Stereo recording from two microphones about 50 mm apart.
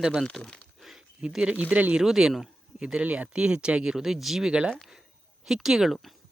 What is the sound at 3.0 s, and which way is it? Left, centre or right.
Speech, right.